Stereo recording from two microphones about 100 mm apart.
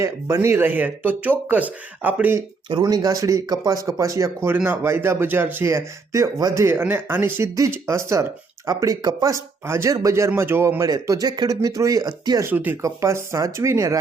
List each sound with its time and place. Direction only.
0.0 s speech: 30° right (ahead or behind)
2.8 s speech: 35° right (ahead or behind)
4.5 s speech: 20° right (ahead or behind); by 12.4 s 40° right (ahead or behind)
12.4 s speech: 20° right (ahead or behind)